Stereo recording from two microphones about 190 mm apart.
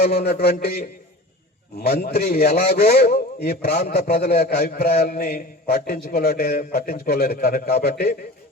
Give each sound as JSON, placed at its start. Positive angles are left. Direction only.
{"t": 0.0, "sound": "a man's voice", "side_deg": 55}
{"t": 1.9, "sound": "a man's voice", "side_deg": 55}